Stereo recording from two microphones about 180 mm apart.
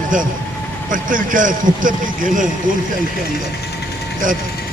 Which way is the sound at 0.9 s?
50° right (ahead or behind).